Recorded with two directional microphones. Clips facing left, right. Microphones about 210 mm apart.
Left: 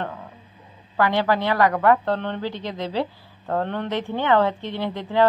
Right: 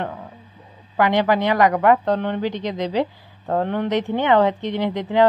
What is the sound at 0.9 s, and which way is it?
A woman's voice, 15° right (ahead or behind).